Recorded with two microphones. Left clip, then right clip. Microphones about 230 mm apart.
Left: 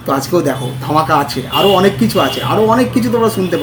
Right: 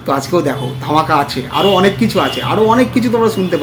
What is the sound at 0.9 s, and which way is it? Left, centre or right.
Speech, centre.